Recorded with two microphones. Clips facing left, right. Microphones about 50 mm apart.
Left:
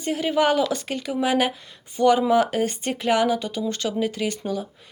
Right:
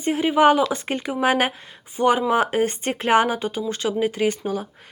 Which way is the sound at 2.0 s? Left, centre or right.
Right.